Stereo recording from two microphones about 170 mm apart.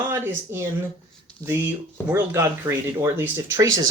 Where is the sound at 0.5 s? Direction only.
15° right (ahead or behind).